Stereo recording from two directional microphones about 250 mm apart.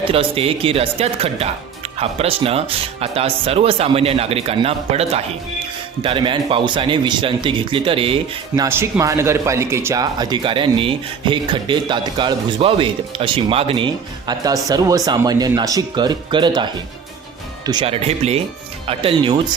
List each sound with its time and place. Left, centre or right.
0.1 s speech: right
8.6 s speech: centre
17.7 s speech: right